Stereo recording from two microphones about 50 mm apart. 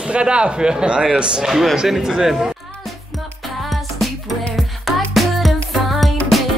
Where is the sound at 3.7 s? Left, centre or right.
Centre.